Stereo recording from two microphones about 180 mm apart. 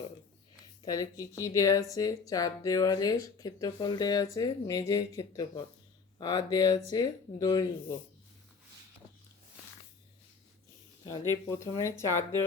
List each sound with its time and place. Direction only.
0.8 s speech: 20° left (ahead or behind)
11.4 s speech: 15° left (ahead or behind)